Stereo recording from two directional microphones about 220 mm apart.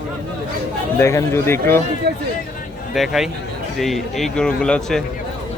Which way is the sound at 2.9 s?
Centre (ahead or behind).